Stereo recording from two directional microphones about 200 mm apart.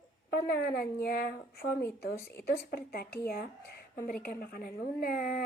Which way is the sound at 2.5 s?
50° left (ahead or behind).